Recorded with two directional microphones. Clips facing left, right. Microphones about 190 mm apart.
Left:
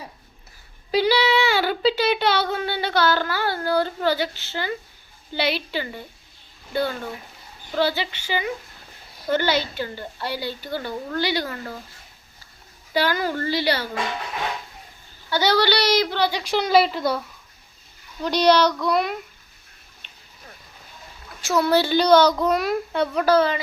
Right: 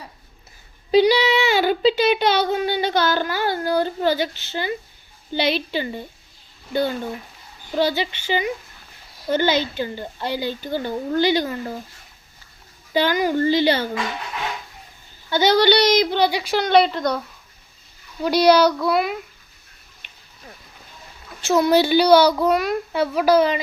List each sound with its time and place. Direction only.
0.9 s speech: 20° right (ahead or behind)
7.8 s speech: 20° right (ahead or behind)
12.9 s speech: 20° right (ahead or behind)
15.3 s speech: 20° right (ahead or behind)
16.4 s a woman's voice: centre (ahead or behind)
18.2 s a child's voice: 10° right (ahead or behind)
21.4 s a child's voice: 20° right (ahead or behind)